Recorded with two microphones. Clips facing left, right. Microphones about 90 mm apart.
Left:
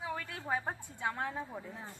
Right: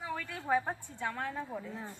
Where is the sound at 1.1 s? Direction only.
15° left (ahead or behind).